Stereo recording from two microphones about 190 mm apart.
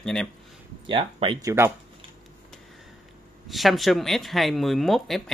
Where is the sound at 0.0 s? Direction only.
5° left (ahead or behind).